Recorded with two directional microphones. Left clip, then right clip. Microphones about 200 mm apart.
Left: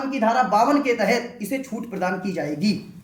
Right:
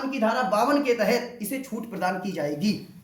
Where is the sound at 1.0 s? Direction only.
65° right (ahead or behind).